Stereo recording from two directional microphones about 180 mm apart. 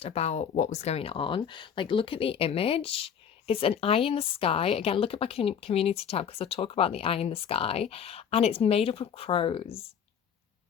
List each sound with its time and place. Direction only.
0.0 s speech: 35° left (ahead or behind)